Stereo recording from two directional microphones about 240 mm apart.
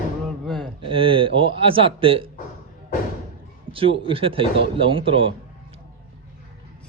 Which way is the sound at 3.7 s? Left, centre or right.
Right.